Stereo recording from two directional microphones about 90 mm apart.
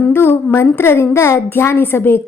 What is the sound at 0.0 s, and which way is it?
A woman's voice, 25° left (ahead or behind).